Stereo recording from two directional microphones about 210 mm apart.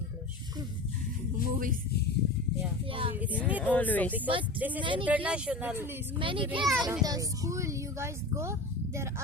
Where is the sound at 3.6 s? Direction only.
10° left (ahead or behind).